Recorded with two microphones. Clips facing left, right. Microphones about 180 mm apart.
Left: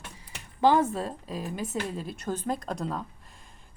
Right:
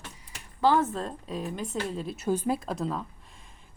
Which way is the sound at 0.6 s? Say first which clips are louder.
Left 1 dB; 15° left (ahead or behind).